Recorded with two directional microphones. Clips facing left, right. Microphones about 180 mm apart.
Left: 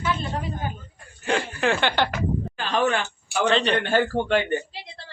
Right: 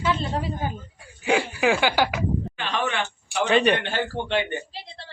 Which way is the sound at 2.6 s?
40° left (ahead or behind).